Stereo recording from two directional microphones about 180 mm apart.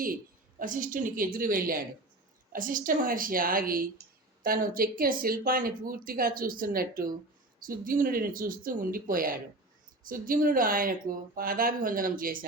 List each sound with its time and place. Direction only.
0.6 s speech: 50° right (ahead or behind)